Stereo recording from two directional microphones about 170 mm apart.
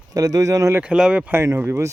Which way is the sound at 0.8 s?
5° right (ahead or behind).